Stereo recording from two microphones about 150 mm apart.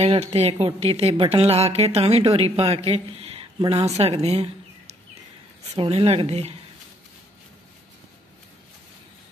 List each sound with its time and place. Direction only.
0.0 s a woman's voice: 40° right (ahead or behind)